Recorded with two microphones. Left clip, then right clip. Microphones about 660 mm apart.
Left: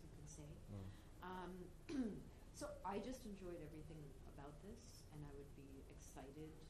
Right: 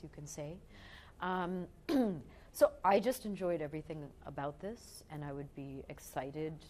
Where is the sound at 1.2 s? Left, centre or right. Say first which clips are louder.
Right 16 dB; right.